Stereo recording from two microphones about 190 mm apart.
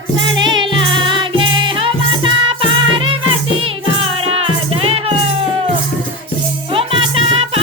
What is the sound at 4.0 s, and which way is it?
Music, 30° right (ahead or behind).